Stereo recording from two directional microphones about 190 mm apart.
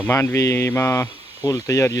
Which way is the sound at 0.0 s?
10° left (ahead or behind).